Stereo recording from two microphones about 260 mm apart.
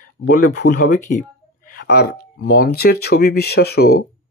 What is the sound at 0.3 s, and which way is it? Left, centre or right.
Speech, left.